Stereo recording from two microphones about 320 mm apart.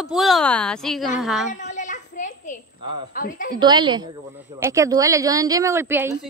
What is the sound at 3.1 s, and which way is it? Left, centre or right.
Speech, left.